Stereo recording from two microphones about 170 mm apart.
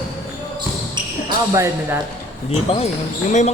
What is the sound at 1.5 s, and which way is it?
Speech, 15° right (ahead or behind).